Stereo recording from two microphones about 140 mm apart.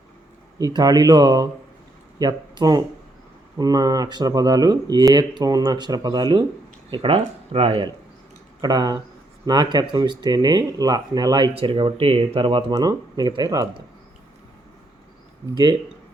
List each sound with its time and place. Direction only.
0.6 s speech: 25° right (ahead or behind)
8.6 s speech: 30° right (ahead or behind)
12.7 s speech: 30° right (ahead or behind)